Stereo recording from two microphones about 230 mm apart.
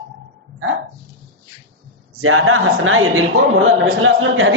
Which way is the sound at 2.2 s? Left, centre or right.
Right.